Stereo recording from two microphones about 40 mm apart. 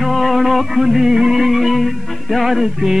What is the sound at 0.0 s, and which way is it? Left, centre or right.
Music, centre.